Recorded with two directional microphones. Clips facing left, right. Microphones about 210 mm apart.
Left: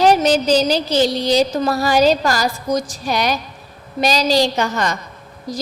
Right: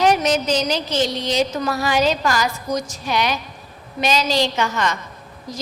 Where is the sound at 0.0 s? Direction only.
30° left (ahead or behind).